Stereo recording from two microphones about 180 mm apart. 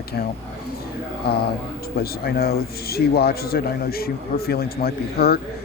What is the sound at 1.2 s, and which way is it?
A man's voice, 60° left (ahead or behind).